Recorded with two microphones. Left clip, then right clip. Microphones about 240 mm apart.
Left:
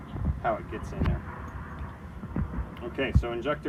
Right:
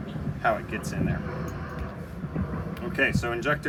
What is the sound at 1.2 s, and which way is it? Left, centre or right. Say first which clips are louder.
Music: right 6 dB; right.